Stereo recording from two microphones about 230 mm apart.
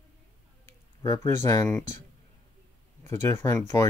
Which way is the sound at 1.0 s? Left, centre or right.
Centre.